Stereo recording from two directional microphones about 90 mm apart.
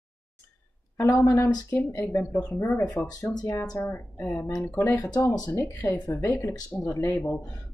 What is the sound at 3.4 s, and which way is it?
Speech, 40° left (ahead or behind).